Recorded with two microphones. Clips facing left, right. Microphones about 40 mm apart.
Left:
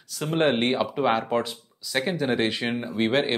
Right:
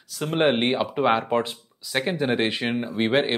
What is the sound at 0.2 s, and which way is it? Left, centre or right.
Speech, centre.